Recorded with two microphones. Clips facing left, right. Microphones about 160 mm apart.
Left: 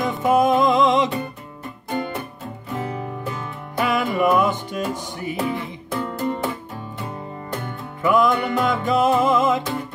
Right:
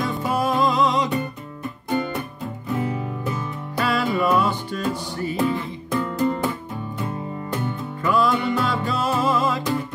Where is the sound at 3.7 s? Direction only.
15° left (ahead or behind).